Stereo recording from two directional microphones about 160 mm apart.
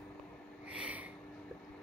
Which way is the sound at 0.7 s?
10° right (ahead or behind).